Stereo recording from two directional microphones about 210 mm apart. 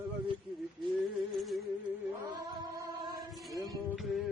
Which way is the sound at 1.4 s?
Centre (ahead or behind).